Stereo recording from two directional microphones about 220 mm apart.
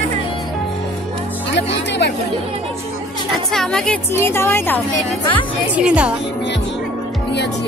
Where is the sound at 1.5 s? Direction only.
50° left (ahead or behind).